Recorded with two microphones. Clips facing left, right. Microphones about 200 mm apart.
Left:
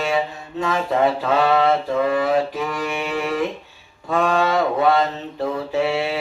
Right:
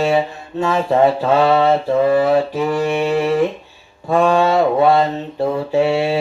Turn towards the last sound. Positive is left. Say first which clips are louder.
# right 5 dB
turn(degrees=-30)  # may be behind; listen again after turning